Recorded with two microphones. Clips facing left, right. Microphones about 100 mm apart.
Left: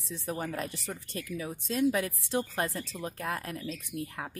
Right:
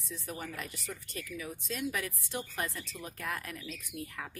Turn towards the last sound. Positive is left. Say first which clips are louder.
# left 6 dB
turn(degrees=35)  # may be behind; listen again after turning